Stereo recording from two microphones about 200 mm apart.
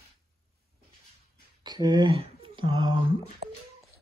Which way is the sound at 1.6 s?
20° right (ahead or behind).